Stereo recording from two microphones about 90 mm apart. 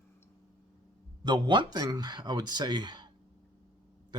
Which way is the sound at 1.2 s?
55° right (ahead or behind).